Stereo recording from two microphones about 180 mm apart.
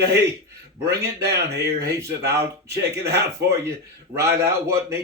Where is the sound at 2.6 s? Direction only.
15° right (ahead or behind).